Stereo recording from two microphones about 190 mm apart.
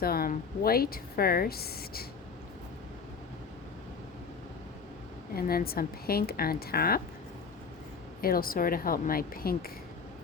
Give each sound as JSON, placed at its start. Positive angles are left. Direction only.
{"t": 0.0, "sound": "a woman's voice", "side_deg": 50}
{"t": 5.3, "sound": "a woman's voice", "side_deg": 50}
{"t": 8.2, "sound": "a woman's voice", "side_deg": 50}